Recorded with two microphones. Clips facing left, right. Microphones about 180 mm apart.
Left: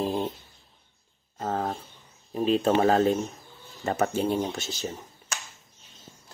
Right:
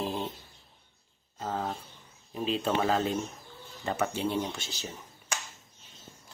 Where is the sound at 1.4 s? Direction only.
45° left (ahead or behind).